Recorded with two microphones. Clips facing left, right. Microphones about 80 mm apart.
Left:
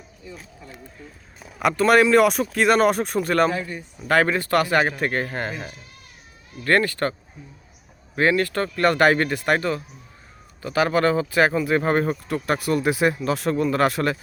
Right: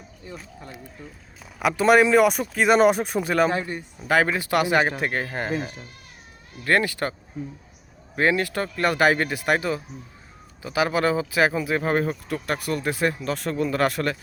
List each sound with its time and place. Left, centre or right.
1.5 s speech: centre
3.5 s speech: right
3.8 s speech: centre